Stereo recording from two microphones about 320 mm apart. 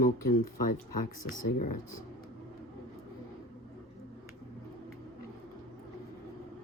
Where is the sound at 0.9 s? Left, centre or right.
Left.